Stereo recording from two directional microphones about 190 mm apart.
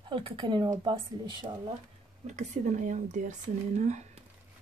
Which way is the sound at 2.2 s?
40° right (ahead or behind).